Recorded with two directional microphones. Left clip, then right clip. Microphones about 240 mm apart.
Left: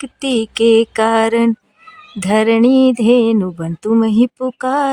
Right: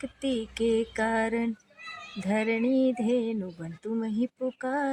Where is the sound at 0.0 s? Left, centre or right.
Left.